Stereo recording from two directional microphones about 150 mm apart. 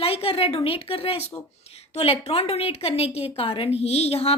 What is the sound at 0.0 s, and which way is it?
A woman's voice, 40° left (ahead or behind).